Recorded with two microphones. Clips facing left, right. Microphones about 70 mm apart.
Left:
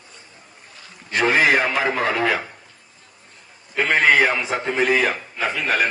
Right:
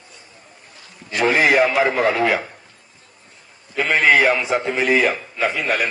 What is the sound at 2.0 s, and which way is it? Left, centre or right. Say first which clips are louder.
Speech: right 3 dB; right.